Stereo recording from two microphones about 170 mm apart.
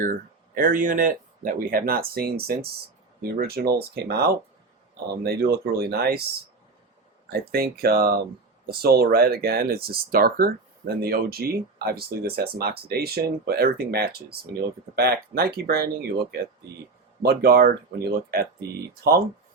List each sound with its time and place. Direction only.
0.0 s speech: 55° right (ahead or behind)
7.3 s speech: 65° right (ahead or behind)
17.2 s speech: 65° right (ahead or behind)